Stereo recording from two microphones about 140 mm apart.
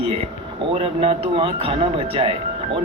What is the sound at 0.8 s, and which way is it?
Speech, 40° right (ahead or behind).